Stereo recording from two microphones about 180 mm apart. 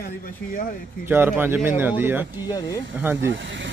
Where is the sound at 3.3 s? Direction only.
90° right.